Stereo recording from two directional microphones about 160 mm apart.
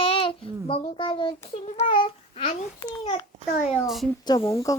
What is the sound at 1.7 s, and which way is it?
Babbling, 35° left (ahead or behind).